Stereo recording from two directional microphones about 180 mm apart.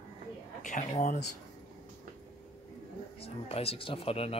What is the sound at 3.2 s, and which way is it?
Speech, 35° left (ahead or behind).